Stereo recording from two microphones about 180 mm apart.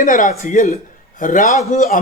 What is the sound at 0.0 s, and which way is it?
A man's voice, 45° left (ahead or behind).